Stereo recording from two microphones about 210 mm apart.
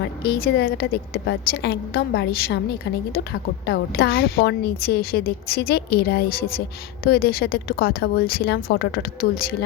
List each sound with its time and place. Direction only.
0.2 s a woman's voice: 45° left (ahead or behind)
3.7 s a woman's voice: 45° left (ahead or behind)